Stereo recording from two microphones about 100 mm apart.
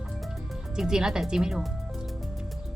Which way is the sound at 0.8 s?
5° right (ahead or behind).